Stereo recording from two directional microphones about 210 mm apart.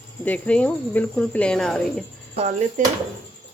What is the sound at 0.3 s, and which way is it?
Speech, 5° left (ahead or behind).